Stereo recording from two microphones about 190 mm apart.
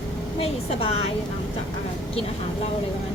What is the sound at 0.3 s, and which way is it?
Speech, 30° left (ahead or behind).